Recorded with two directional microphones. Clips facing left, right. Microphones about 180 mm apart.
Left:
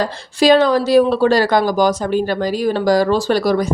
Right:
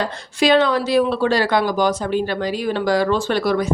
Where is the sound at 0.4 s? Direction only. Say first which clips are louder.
Left 4 dB; 40° left (ahead or behind).